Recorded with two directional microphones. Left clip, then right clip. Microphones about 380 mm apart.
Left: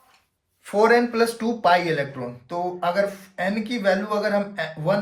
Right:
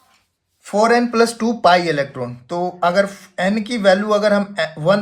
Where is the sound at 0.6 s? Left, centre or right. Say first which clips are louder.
Right 3 dB; centre.